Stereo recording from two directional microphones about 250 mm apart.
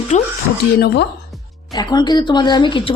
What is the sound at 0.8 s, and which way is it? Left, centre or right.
Speech, left.